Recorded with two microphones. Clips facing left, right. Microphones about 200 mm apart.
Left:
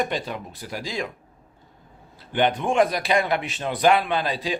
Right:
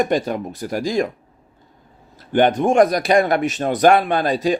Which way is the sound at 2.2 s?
45° right (ahead or behind).